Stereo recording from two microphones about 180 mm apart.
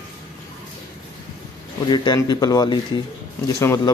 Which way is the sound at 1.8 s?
25° left (ahead or behind).